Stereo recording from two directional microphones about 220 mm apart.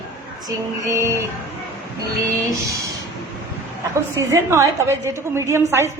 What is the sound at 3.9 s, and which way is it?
A woman's voice, 15° right (ahead or behind).